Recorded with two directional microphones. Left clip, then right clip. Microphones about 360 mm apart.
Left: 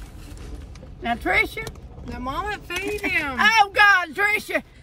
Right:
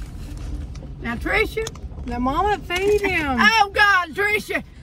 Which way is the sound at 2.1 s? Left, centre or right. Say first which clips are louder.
Right 7 dB; centre.